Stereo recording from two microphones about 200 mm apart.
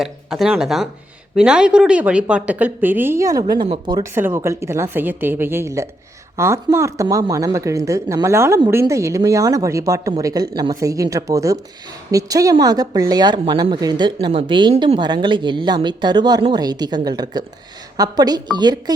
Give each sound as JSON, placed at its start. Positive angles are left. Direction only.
{"t": 0.0, "sound": "a woman's voice", "side_deg": 0}